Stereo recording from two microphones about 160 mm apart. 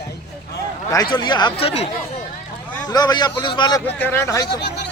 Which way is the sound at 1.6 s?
40° left (ahead or behind).